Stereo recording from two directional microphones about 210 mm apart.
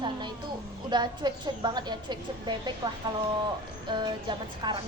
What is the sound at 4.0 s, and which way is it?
Speech, 20° right (ahead or behind).